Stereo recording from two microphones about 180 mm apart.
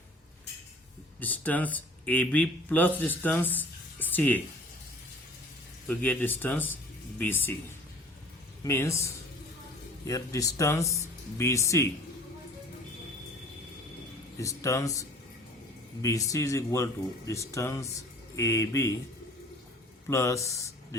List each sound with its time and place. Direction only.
1.2 s speech: 10° left (ahead or behind)
5.9 s speech: 10° left (ahead or behind)
8.6 s speech: 15° left (ahead or behind)
10.1 s speech: 20° left (ahead or behind)
14.4 s speech: 15° left (ahead or behind)
20.1 s speech: 15° left (ahead or behind)